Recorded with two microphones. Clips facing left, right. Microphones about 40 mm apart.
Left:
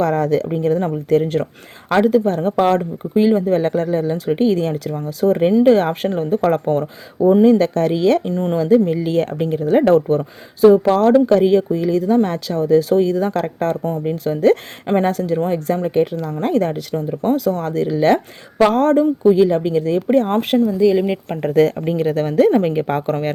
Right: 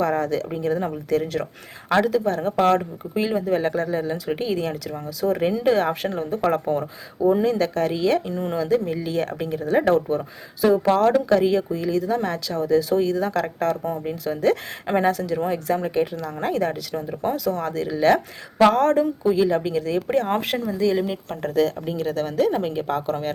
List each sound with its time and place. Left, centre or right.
0.0 s speech: left
3.2 s a woman's voice: left
3.5 s speech: left
11.1 s speech: left
20.7 s speech: centre
21.1 s a woman's voice: left